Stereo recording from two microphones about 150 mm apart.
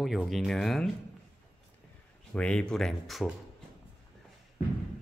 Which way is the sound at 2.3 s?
5° left (ahead or behind).